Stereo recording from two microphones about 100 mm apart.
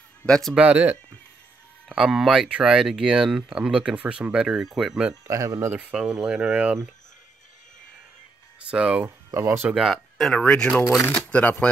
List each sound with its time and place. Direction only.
0.3 s speech: 5° left (ahead or behind)
0.6 s speech: 15° right (ahead or behind)
5.3 s speech: 30° right (ahead or behind)
5.7 s speech: 15° right (ahead or behind)
8.6 s speech: 10° right (ahead or behind)
9.0 s speech: 30° right (ahead or behind)
9.7 s speech: 5° right (ahead or behind); by 11.5 s 15° left (ahead or behind)